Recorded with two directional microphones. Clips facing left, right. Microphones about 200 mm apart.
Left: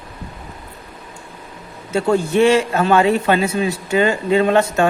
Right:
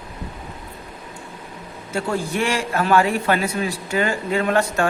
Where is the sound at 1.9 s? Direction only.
25° left (ahead or behind).